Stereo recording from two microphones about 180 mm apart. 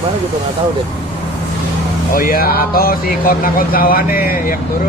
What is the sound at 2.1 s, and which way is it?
Speech, 50° left (ahead or behind).